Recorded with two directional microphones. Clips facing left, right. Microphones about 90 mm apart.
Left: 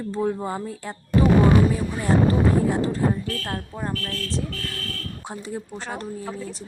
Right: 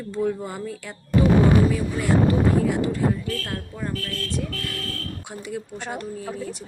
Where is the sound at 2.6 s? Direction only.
35° left (ahead or behind).